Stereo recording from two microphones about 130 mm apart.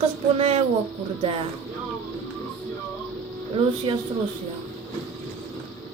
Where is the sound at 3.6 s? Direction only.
45° right (ahead or behind).